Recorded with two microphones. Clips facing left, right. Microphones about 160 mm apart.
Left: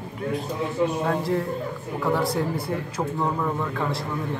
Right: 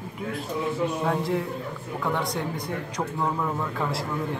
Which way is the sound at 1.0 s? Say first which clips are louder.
Left 2 dB; centre (ahead or behind).